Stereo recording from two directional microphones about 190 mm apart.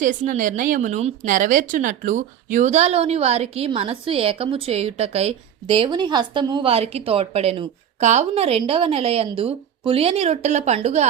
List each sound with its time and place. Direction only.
0.0 s a woman's voice: 40° right (ahead or behind)